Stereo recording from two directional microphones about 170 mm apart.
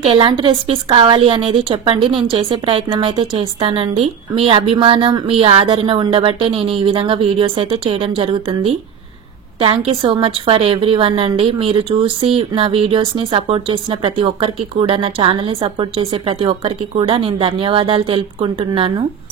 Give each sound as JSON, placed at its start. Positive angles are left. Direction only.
{"t": 0.0, "sound": "a woman's voice", "side_deg": -30}